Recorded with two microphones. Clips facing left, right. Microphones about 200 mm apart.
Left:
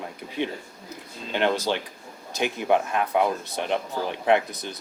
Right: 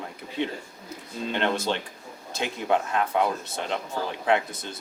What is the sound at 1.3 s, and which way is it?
Speech, 15° left (ahead or behind).